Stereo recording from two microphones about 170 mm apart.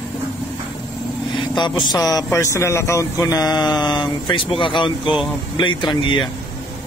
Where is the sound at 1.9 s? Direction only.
20° left (ahead or behind).